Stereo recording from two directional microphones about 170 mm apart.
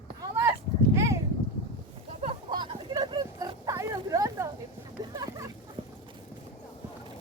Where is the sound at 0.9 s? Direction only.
15° right (ahead or behind).